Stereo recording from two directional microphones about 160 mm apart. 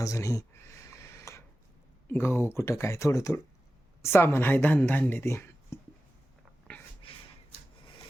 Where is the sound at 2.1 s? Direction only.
15° left (ahead or behind).